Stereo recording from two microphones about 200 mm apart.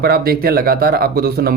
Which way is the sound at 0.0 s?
50° right (ahead or behind).